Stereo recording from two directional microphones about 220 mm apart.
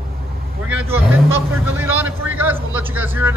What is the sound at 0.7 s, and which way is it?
Vehicle, 10° right (ahead or behind).